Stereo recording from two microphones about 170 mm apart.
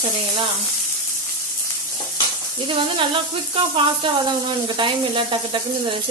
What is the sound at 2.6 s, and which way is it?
Sizzle, 30° right (ahead or behind).